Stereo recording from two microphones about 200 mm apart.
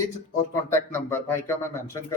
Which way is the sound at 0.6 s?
10° left (ahead or behind).